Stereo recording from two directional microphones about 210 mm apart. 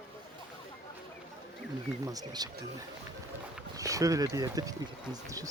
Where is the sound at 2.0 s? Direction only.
20° right (ahead or behind).